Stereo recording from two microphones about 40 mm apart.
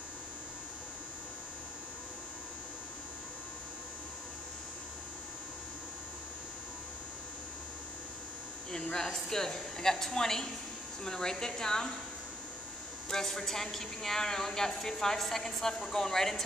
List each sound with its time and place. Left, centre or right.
8.7 s a man's voice: centre
13.1 s a man's voice: centre